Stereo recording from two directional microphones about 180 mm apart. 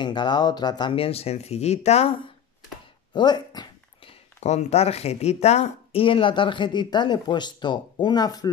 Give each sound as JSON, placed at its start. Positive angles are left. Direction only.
{"t": 0.0, "sound": "speech", "side_deg": 25}
{"t": 3.1, "sound": "a sound", "side_deg": 25}
{"t": 4.4, "sound": "speech", "side_deg": 40}